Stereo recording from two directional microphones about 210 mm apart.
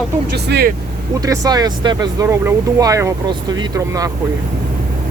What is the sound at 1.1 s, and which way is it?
Speech, 15° right (ahead or behind).